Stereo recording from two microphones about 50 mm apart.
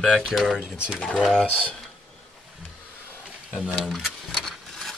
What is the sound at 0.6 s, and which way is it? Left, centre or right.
Speech, right.